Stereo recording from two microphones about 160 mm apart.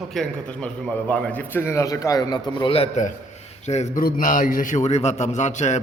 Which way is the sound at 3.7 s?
45° left (ahead or behind).